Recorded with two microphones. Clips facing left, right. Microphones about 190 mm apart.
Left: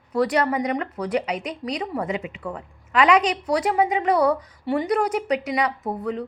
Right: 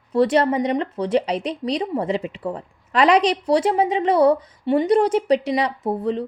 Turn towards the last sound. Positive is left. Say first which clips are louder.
# right 4 dB
turn(degrees=-30)  # may be behind; listen again after turning